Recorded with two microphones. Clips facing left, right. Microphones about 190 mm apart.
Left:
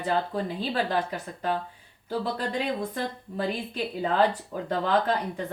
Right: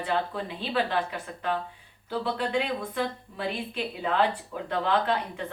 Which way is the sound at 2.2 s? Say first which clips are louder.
Right 2 dB; 40° left (ahead or behind).